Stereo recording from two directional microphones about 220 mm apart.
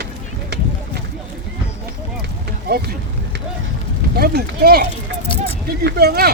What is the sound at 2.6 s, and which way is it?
Vehicle, 45° right (ahead or behind).